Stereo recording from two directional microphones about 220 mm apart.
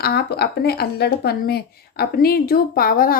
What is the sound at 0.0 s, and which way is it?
A woman's voice, 45° left (ahead or behind).